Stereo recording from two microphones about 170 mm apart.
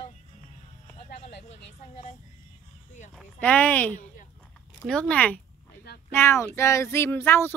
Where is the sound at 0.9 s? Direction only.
40° left (ahead or behind).